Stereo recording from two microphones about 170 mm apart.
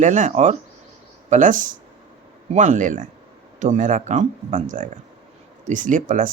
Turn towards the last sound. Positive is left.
turn(degrees=-50)  # may be behind; listen again after turning